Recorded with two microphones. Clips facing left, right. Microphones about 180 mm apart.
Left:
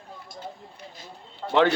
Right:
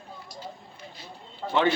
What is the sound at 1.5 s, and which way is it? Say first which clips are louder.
Speech: left 3 dB; 90° left.